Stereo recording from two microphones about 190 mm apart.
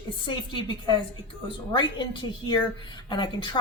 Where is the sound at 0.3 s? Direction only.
25° left (ahead or behind).